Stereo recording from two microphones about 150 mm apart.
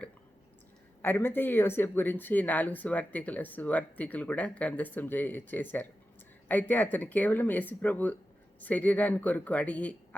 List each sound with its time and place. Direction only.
1.0 s speech: 15° left (ahead or behind)